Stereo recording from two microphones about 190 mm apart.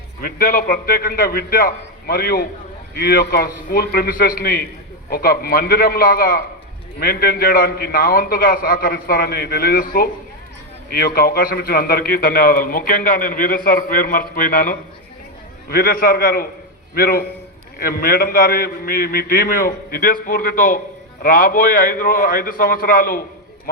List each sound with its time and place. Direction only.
0.2 s a man's voice: 45° left (ahead or behind)